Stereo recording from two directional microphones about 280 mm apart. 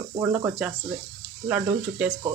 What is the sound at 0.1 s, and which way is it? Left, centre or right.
Speech, centre.